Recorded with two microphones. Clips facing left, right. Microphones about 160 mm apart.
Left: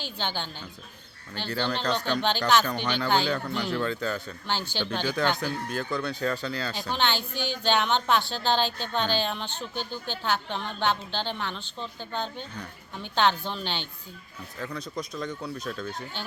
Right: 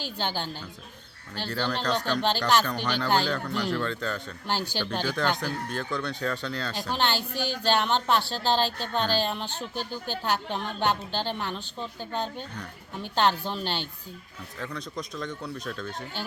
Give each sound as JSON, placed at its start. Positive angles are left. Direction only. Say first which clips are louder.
{"t": 0.0, "sound": "speech", "louder": "right 2 dB", "side_deg": -5}
{"t": 4.4, "sound": "speech", "louder": "right 1 dB", "side_deg": -10}
{"t": 7.3, "sound": "speech", "louder": "right 1 dB", "side_deg": -40}
{"t": 7.7, "sound": "speech", "louder": "even", "side_deg": -5}